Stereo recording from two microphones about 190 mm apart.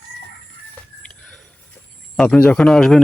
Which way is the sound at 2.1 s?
5° left (ahead or behind).